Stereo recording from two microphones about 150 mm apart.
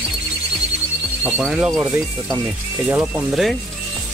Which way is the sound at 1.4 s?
Centre (ahead or behind).